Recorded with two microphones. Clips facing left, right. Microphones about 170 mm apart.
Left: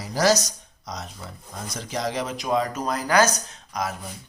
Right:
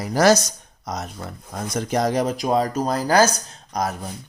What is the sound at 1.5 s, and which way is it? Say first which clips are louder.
Speech: right 8 dB; 55° right (ahead or behind).